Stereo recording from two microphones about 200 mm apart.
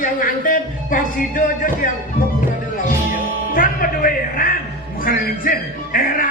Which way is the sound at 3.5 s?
45° left (ahead or behind).